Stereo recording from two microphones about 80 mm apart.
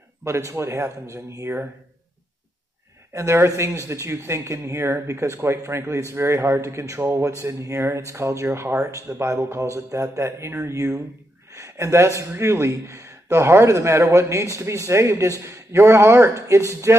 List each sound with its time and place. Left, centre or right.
0.2 s speech: right
3.1 s speech: right